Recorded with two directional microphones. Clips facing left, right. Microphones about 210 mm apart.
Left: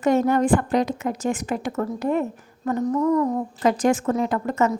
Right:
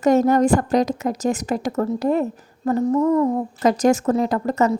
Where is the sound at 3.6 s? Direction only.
40° right (ahead or behind).